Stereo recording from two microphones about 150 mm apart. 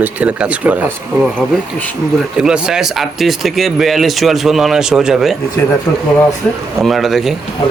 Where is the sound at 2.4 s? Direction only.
5° right (ahead or behind).